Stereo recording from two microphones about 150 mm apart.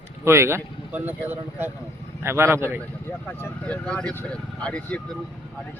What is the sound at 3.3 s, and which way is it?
Speech, 10° left (ahead or behind).